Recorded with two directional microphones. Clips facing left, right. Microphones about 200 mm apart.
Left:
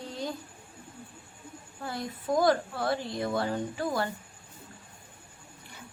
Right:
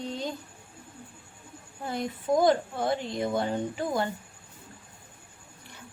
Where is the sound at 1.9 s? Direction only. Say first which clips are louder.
Right 4 dB; 20° right (ahead or behind).